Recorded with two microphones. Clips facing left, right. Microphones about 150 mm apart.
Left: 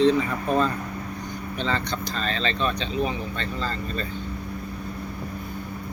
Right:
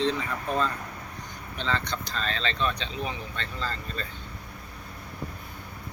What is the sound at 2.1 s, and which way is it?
Speech, 5° left (ahead or behind).